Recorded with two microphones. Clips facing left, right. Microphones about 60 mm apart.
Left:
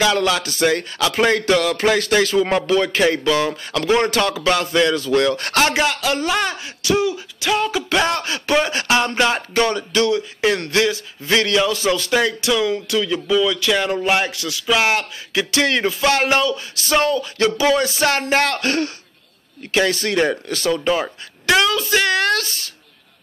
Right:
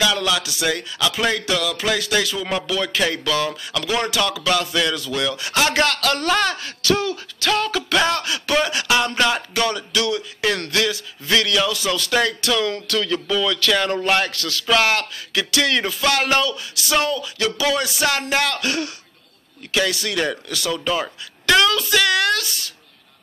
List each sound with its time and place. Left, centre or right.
0.0 s speech: left
5.7 s speech: centre; by 22.7 s left